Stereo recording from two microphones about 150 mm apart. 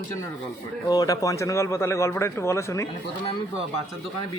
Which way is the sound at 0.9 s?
25° left (ahead or behind).